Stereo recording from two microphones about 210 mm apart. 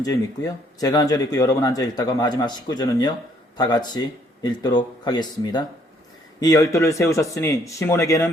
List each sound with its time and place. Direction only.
0.0 s speech: 15° left (ahead or behind)